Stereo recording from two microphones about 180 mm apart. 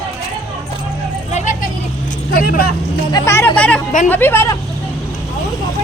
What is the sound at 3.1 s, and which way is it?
Speech, 15° left (ahead or behind).